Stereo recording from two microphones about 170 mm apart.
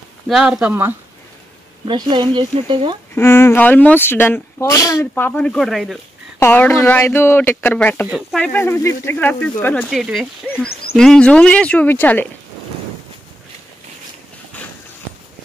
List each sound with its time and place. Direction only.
0.3 s speech: 5° right (ahead or behind)
1.9 s speech: 25° right (ahead or behind)
3.2 s speech: 15° left (ahead or behind)
6.4 s speech: 10° left (ahead or behind)
8.1 s speech: centre (ahead or behind)
8.5 s speech: 15° left (ahead or behind)
9.8 s speech: centre (ahead or behind)